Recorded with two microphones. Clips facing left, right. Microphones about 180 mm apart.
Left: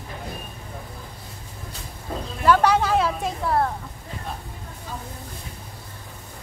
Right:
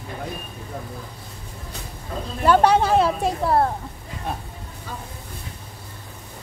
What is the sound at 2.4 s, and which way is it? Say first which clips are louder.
A woman's voice: right 2 dB; 30° right (ahead or behind).